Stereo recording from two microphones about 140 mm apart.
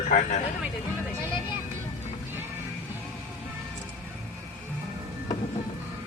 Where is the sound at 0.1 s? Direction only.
60° left (ahead or behind).